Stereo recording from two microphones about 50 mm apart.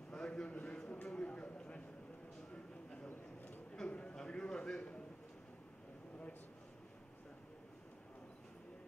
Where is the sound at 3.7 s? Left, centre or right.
Left.